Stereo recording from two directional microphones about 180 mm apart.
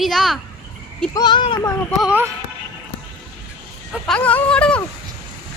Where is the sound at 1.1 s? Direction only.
25° left (ahead or behind).